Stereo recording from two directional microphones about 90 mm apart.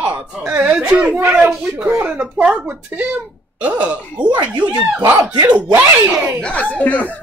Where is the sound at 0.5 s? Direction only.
15° right (ahead or behind).